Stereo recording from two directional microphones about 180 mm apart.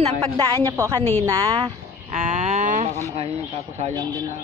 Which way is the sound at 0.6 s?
15° right (ahead or behind).